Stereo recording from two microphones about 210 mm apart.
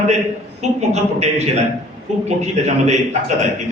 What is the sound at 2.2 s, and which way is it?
Speech, 35° right (ahead or behind).